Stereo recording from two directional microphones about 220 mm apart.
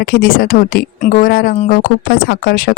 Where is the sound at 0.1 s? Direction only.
40° left (ahead or behind).